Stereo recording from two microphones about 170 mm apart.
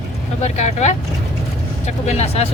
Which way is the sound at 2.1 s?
40° left (ahead or behind).